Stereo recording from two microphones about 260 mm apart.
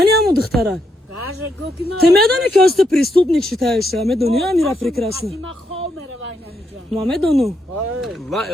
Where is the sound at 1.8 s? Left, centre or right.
Right.